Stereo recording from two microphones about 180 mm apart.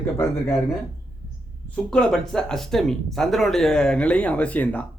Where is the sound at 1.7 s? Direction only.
5° left (ahead or behind).